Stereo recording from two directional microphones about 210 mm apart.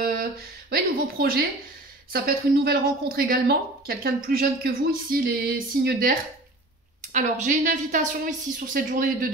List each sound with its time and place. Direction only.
0.0 s a woman's voice: 45° right (ahead or behind)